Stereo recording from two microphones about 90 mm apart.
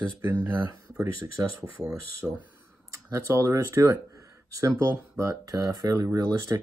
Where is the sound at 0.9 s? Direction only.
40° right (ahead or behind).